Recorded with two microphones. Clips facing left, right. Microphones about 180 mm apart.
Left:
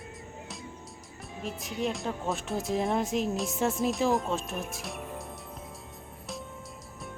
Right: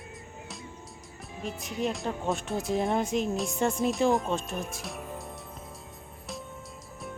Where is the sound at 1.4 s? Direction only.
Centre (ahead or behind).